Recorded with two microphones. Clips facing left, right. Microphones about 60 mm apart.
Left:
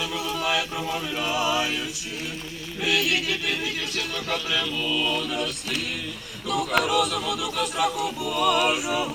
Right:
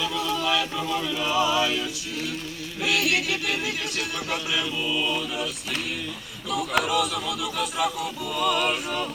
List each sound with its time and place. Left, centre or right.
0.2 s a capella: left
1.3 s music: left
2.8 s speech: left
4.5 s music: centre
6.5 s speech: centre